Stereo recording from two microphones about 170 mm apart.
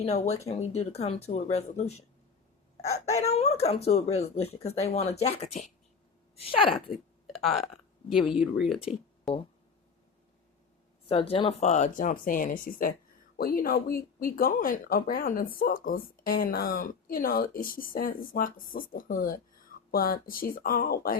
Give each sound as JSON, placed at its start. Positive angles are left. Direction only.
{"t": 0.0, "sound": "speech", "side_deg": 40}
{"t": 6.9, "sound": "a sound", "side_deg": 0}
{"t": 8.2, "sound": "speech", "side_deg": 30}
{"t": 8.5, "sound": "speech", "side_deg": 0}
{"t": 11.1, "sound": "speech", "side_deg": 35}